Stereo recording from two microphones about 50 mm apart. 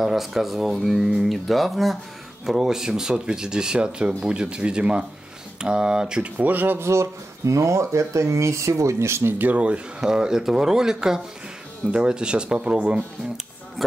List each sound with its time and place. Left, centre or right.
0.0 s speech: centre
6.3 s speech: right
6.8 s speech: right
9.6 s speech: centre
13.8 s speech: centre